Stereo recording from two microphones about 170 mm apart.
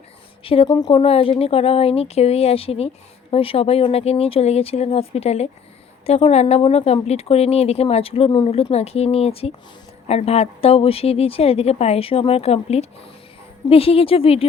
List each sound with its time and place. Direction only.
0.4 s speech: 30° left (ahead or behind)